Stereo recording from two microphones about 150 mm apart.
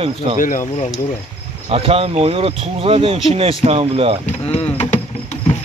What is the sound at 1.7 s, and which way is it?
Speech, 40° right (ahead or behind).